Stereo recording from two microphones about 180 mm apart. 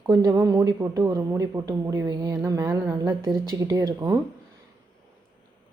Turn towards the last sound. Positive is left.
turn(degrees=-20)  # may be behind; listen again after turning